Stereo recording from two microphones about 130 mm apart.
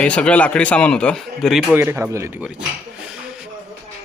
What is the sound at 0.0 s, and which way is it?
Speech, 10° left (ahead or behind).